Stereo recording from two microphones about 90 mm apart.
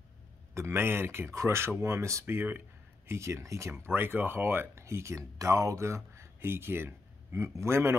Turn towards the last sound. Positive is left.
turn(degrees=-30)  # may be behind; listen again after turning